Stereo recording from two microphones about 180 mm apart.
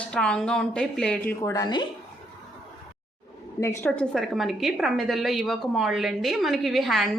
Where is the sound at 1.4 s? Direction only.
20° left (ahead or behind).